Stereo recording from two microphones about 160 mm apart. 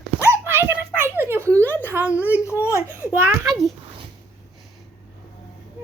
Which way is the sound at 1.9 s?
10° right (ahead or behind).